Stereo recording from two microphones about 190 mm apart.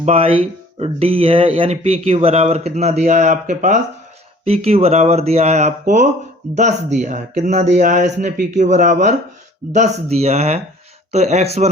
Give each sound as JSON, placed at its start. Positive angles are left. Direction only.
{"t": 0.0, "sound": "speech", "side_deg": -30}